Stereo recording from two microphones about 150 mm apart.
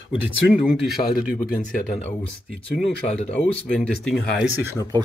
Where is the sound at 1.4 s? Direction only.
70° left (ahead or behind).